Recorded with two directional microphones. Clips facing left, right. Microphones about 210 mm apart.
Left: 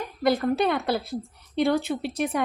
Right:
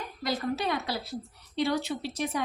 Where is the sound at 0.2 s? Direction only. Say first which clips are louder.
Left 8 dB; 55° left (ahead or behind).